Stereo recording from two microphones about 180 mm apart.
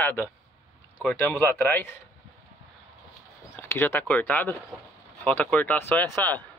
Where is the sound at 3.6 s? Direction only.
10° left (ahead or behind).